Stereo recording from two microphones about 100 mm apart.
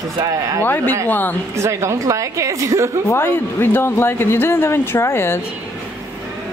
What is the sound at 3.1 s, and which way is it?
Speech, 25° left (ahead or behind).